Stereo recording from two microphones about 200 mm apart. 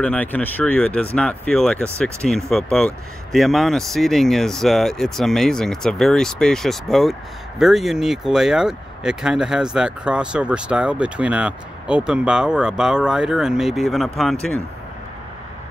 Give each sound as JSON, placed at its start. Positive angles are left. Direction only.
{"t": 0.0, "sound": "speech", "side_deg": 5}